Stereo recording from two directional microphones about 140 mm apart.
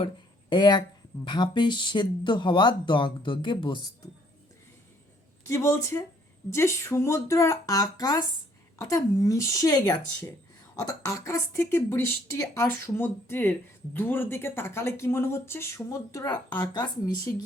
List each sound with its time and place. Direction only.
0.5 s speech: 30° left (ahead or behind)
5.5 s a woman's voice: 20° left (ahead or behind)